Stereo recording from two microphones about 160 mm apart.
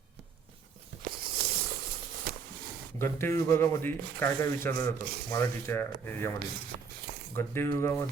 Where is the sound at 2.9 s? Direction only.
15° left (ahead or behind).